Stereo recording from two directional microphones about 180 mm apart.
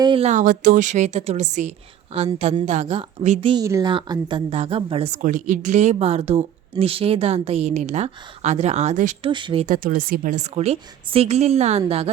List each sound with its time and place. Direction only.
0.0 s a woman's voice: 30° right (ahead or behind)
3.5 s a woman's voice: 20° right (ahead or behind); by 9.1 s 40° right (ahead or behind)
9.2 s speech: 25° right (ahead or behind)
9.6 s a woman's voice: 50° right (ahead or behind); by 12.1 s 35° right (ahead or behind)